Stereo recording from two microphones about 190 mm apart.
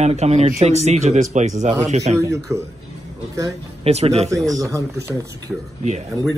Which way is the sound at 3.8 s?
35° right (ahead or behind).